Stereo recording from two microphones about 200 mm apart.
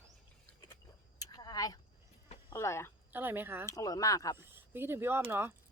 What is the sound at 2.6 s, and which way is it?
Speech, 15° left (ahead or behind).